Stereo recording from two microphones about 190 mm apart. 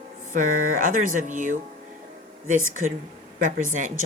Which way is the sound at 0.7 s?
45° right (ahead or behind).